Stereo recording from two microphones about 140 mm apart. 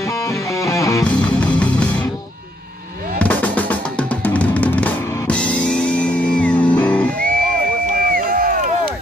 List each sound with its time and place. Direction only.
0.0 s music: 20° left (ahead or behind)
1.0 s music: 10° left (ahead or behind)
3.2 s drum: 10° left (ahead or behind)
7.2 s music: 90° right
8.0 s a sound: 90° right